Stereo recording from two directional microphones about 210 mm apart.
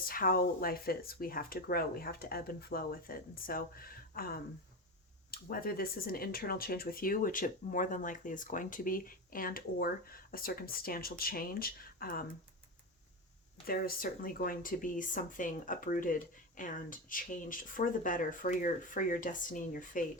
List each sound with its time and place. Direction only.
0.0 s speech: 45° left (ahead or behind)
13.7 s speech: 45° left (ahead or behind)